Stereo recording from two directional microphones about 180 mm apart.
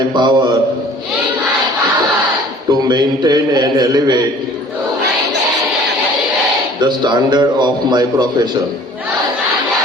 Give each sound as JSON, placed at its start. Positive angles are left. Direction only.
{"t": 0.1, "sound": "a man's voice", "side_deg": -25}
{"t": 2.7, "sound": "a man's voice", "side_deg": -20}
{"t": 6.7, "sound": "a man's voice", "side_deg": -25}